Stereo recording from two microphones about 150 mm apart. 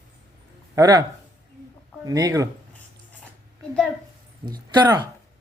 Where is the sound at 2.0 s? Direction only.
25° right (ahead or behind).